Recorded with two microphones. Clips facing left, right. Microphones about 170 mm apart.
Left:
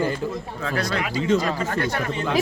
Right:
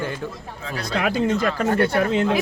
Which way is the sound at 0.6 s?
55° left (ahead or behind).